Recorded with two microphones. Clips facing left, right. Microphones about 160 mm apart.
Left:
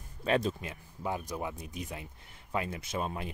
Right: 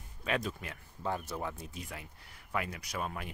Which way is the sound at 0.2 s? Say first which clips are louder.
Left 5 dB; 30° left (ahead or behind).